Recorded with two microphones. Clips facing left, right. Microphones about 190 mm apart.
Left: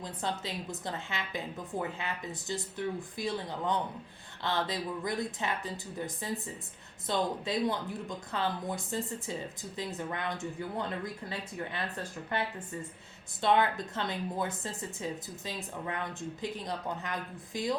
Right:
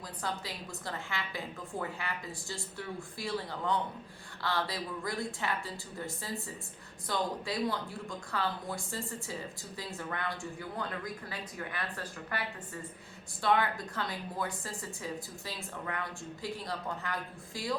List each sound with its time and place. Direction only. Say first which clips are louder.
0.0 s speech: left 3 dB; 25° left (ahead or behind)